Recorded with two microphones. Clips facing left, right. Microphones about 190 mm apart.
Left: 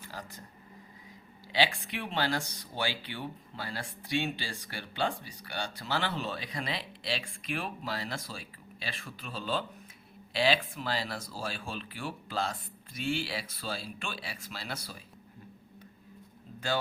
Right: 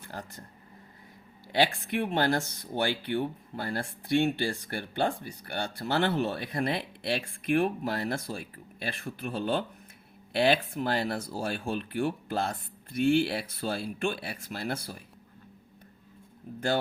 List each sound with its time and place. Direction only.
0.1 s speech: 55° right (ahead or behind)
1.5 s speech: 55° right (ahead or behind)
16.5 s speech: 55° right (ahead or behind)